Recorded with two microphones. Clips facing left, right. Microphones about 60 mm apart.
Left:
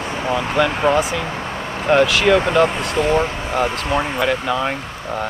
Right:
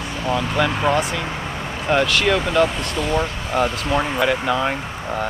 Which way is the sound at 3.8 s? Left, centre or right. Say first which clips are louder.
Even; centre.